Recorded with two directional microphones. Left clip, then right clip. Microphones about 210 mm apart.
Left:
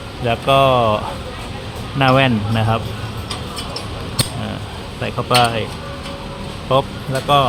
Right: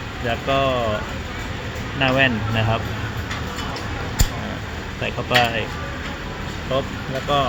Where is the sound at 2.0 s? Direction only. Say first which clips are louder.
Left 4 dB; 25° left (ahead or behind).